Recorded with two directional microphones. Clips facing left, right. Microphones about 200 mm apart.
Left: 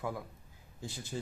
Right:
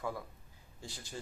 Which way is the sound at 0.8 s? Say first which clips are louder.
Left 5 dB; 20° left (ahead or behind).